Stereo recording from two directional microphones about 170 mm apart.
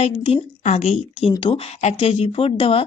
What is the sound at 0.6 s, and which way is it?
Speech, 40° left (ahead or behind).